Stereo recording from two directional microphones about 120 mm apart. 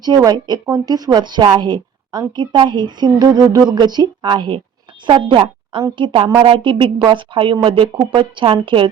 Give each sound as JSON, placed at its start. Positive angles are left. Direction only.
{"t": 0.2, "sound": "a woman's voice", "side_deg": -35}